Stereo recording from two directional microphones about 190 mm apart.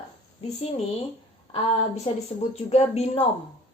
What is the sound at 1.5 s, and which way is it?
Speech, 35° left (ahead or behind).